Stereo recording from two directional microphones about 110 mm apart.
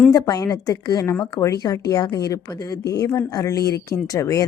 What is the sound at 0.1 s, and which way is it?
A woman's voice, 35° left (ahead or behind).